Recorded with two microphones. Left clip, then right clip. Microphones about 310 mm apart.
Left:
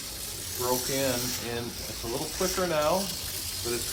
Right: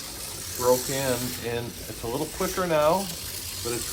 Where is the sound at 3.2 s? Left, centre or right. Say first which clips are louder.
Right 1 dB; centre.